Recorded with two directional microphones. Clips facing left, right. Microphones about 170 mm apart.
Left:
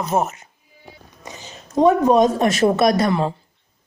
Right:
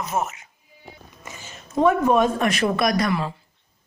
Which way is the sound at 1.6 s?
35° left (ahead or behind).